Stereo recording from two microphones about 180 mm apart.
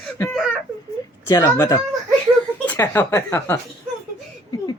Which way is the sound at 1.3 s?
20° left (ahead or behind).